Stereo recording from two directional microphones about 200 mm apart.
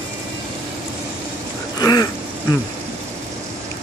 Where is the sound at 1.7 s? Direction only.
20° left (ahead or behind).